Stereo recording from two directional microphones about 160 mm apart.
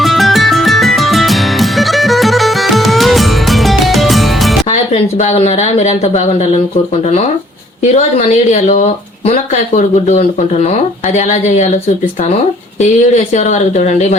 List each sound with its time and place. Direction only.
0.0 s music: centre (ahead or behind)
4.7 s speech: 45° left (ahead or behind)
7.8 s speech: 45° left (ahead or behind)
12.8 s speech: 45° left (ahead or behind)